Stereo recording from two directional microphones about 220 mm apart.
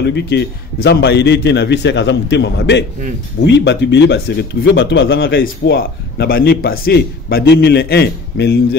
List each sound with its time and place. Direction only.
0.0 s a man's voice: 50° left (ahead or behind)
5.3 s a man's voice: 45° left (ahead or behind)